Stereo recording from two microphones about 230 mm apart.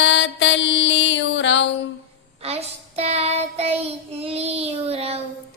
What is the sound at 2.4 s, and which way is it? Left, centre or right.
Child singing, right.